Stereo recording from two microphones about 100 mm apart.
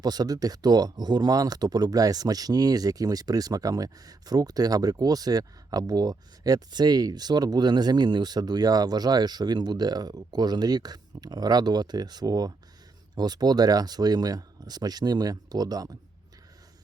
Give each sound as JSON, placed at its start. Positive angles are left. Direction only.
{"t": 0.0, "sound": "speech", "side_deg": -40}